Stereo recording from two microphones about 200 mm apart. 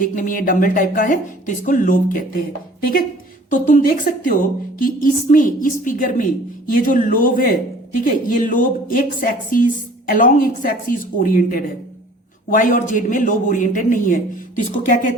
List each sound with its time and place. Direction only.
0.0 s a man's voice: 45° left (ahead or behind)
3.5 s a woman's voice: 40° left (ahead or behind)